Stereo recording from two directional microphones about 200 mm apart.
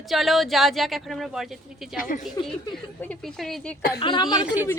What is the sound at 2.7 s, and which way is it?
Speech, 5° left (ahead or behind).